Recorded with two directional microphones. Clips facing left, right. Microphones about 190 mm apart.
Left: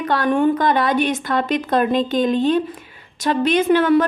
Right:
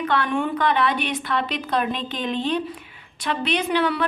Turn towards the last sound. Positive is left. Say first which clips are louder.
# left 8 dB
turn(degrees=45)  # may be behind; listen again after turning